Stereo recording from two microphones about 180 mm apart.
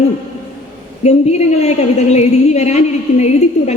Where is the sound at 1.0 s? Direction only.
35° left (ahead or behind).